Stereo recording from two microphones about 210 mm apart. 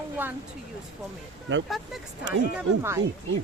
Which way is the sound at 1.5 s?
60° right (ahead or behind).